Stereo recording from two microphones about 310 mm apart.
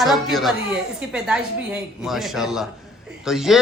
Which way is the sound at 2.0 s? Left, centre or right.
Centre.